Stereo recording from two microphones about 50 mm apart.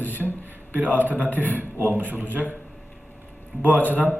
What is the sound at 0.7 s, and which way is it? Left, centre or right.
A man's voice, right.